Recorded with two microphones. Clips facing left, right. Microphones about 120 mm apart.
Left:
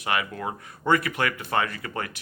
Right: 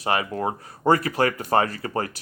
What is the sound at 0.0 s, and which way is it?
Speech, 35° right (ahead or behind).